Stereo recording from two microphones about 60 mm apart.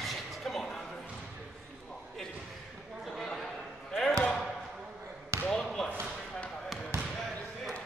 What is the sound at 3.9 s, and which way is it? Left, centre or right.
Basketball bounce, centre.